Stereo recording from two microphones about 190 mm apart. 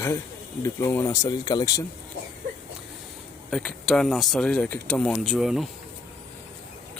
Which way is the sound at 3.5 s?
5° left (ahead or behind).